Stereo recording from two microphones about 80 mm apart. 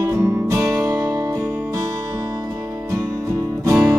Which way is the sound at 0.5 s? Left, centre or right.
Right.